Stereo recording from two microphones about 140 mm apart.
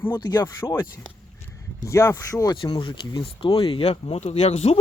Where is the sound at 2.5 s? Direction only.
35° left (ahead or behind).